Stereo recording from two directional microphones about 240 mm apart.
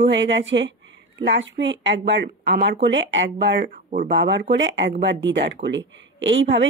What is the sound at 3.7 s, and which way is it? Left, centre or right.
Speech, right.